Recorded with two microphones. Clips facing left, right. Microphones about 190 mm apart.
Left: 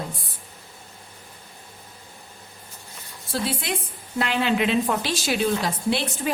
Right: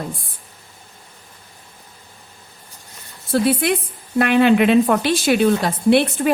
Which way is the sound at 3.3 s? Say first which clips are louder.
Right 10 dB; 60° right (ahead or behind).